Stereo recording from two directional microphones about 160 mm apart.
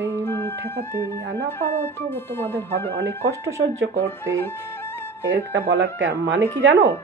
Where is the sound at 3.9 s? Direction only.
15° left (ahead or behind).